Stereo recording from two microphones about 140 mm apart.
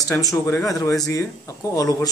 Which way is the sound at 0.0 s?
25° left (ahead or behind).